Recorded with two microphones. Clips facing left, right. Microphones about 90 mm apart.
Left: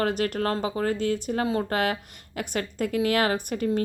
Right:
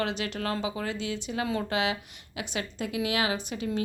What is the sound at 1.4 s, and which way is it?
A woman's voice, 40° left (ahead or behind).